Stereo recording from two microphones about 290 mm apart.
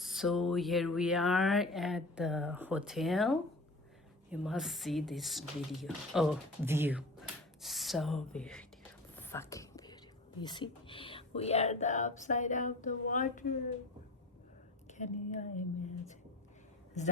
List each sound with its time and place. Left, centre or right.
0.0 s speech: centre
9.1 s whispering: centre
10.4 s speech: centre
14.8 s speech: left
17.0 s speech: left